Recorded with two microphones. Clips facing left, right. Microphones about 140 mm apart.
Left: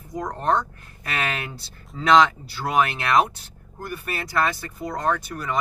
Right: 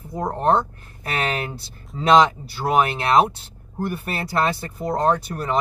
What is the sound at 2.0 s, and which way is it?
Speech, 25° right (ahead or behind).